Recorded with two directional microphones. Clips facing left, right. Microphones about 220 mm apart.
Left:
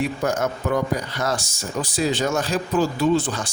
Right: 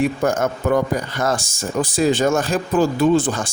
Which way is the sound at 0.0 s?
50° right (ahead or behind).